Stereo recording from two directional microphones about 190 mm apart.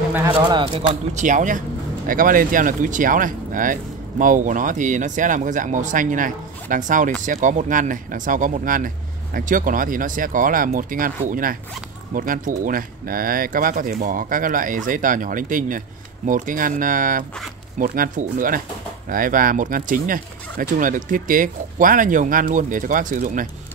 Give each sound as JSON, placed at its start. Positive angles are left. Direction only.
{"t": 0.3, "sound": "speech", "side_deg": -25}
{"t": 1.1, "sound": "speech", "side_deg": -40}